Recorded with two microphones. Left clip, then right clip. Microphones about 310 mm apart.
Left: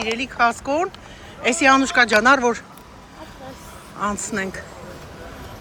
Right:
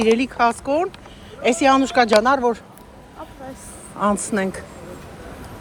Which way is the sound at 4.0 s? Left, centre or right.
Centre.